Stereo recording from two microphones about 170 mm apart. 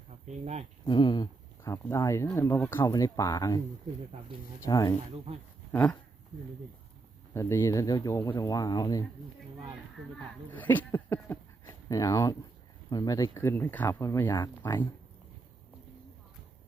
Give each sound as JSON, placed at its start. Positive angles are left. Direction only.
{"t": 0.3, "sound": "speech", "side_deg": -40}
{"t": 0.9, "sound": "speech", "side_deg": 30}
{"t": 4.6, "sound": "speech", "side_deg": 20}
{"t": 5.7, "sound": "speech", "side_deg": 10}
{"t": 7.3, "sound": "speech", "side_deg": 15}
{"t": 10.5, "sound": "speech", "side_deg": 10}